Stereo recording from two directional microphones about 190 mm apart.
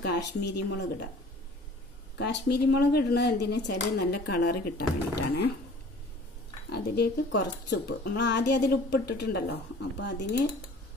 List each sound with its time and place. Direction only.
0.0 s speech: 60° left (ahead or behind)
2.1 s speech: 60° left (ahead or behind)
6.7 s speech: 65° left (ahead or behind)